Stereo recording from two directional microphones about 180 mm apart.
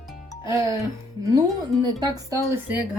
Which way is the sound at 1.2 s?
20° right (ahead or behind).